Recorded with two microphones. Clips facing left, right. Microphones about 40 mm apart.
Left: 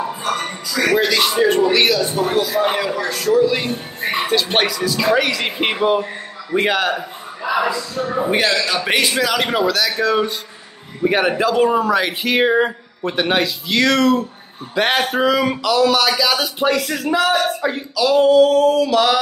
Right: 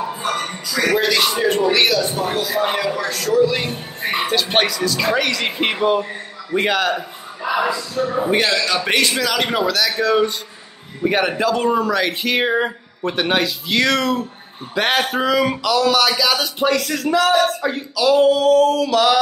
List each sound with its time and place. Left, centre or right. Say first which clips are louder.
0.8 s speech: left 1 dB; centre
2.4 s speech: left 2 dB; centre
2.7 s speech: left 1 dB; centre
7.4 s a sound: left 1 dB; centre
8.2 s speech: left 1 dB; centre